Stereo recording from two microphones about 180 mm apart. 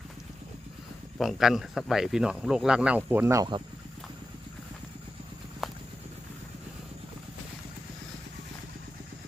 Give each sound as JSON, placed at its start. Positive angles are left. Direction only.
{"t": 1.2, "sound": "speech", "side_deg": 0}
{"t": 5.6, "sound": "clip-clop", "side_deg": 0}